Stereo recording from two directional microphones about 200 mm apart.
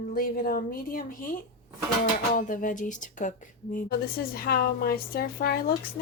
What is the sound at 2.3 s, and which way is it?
A woman's voice, 40° left (ahead or behind).